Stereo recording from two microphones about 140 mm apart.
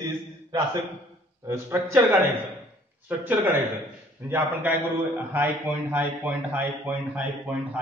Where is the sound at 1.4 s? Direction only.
20° right (ahead or behind).